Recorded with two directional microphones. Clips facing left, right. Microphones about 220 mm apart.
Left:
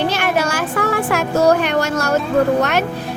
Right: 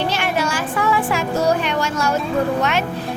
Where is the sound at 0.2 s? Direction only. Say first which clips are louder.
Left 3 dB; 45° left (ahead or behind).